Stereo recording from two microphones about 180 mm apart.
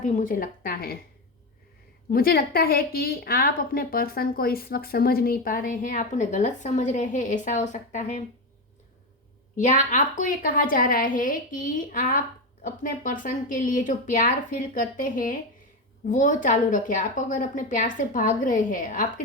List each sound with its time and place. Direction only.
0.0 s a woman's voice: 50° left (ahead or behind)
2.0 s a woman's voice: 55° left (ahead or behind)
9.6 s a woman's voice: 45° left (ahead or behind)